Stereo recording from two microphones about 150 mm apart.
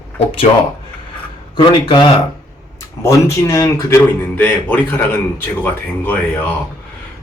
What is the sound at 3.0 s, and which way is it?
Speech, 20° left (ahead or behind).